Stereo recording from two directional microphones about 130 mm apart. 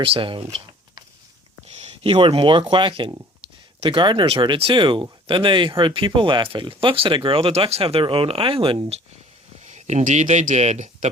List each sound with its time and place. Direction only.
0.0 s speech: 40° right (ahead or behind)
1.6 s speech: 50° right (ahead or behind)
9.6 s speech: 60° right (ahead or behind)